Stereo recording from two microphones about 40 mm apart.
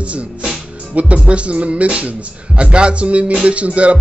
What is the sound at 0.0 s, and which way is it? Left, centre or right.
Music, right.